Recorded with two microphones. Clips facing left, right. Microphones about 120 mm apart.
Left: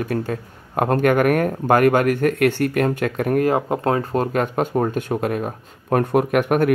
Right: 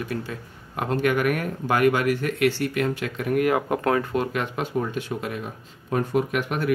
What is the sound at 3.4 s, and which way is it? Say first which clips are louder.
A man's voice: even; 30° left (ahead or behind).